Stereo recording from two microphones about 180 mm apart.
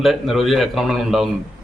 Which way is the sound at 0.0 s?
Centre (ahead or behind).